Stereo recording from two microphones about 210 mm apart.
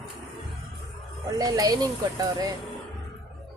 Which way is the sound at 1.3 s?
15° right (ahead or behind).